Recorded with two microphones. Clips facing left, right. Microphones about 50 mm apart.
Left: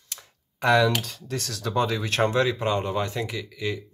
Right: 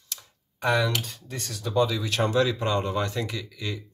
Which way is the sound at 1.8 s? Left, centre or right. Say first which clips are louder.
Even; left.